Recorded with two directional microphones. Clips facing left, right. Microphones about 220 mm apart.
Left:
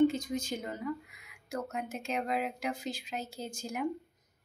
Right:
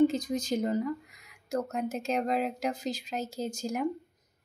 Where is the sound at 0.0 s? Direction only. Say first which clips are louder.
Right 2 dB; 40° right (ahead or behind).